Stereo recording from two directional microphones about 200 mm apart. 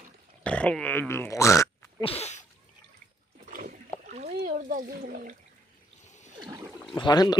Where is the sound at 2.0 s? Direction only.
30° left (ahead or behind).